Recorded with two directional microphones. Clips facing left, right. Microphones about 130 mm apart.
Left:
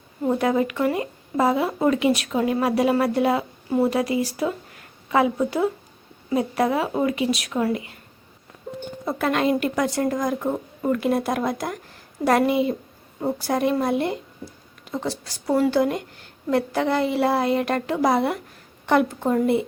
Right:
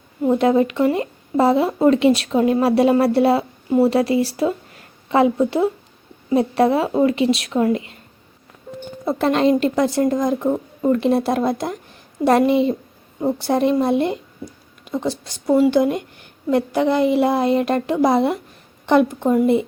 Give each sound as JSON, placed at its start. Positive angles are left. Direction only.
{"t": 0.3, "sound": "a woman's voice", "side_deg": -25}
{"t": 9.0, "sound": "a woman's voice", "side_deg": -30}